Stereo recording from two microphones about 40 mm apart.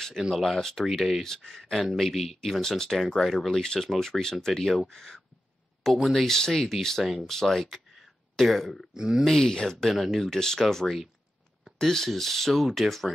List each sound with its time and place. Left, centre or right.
0.4 s speech: centre
0.8 s speech: centre
1.2 s speech: centre
2.0 s speech: centre
3.6 s speech: centre
4.5 s speech: centre
7.9 s a sound: centre
8.9 s speech: centre
9.2 s speech: centre
9.9 s speech: centre
10.2 s speech: centre